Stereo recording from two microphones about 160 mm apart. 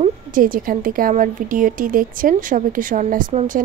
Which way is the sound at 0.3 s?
60° right (ahead or behind).